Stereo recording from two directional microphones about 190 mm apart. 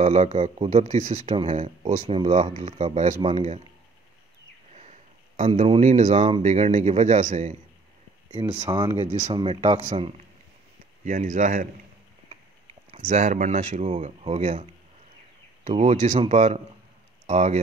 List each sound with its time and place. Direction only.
0.0 s speech: 35° right (ahead or behind)
5.4 s speech: 35° right (ahead or behind)
8.5 s speech: 20° right (ahead or behind)
11.1 s speech: 40° right (ahead or behind)
12.9 s speech: 40° right (ahead or behind)